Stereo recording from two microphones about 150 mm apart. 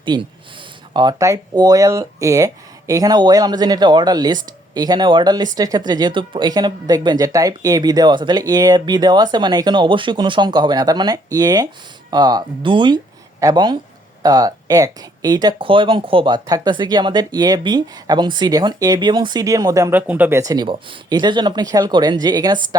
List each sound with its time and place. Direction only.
0.0 s speech: 30° right (ahead or behind); by 20.4 s 10° right (ahead or behind)
20.4 s speech: 25° right (ahead or behind)